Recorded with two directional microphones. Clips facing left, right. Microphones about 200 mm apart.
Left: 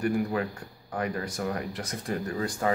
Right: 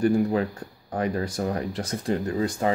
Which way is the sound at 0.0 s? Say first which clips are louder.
Right 5 dB; 30° right (ahead or behind).